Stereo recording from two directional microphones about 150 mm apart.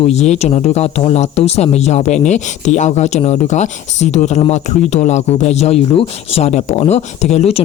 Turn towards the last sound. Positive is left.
turn(degrees=40)  # may be behind; listen again after turning